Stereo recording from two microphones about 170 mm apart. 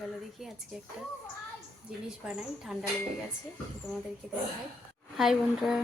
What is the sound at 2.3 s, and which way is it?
Speech, 5° right (ahead or behind).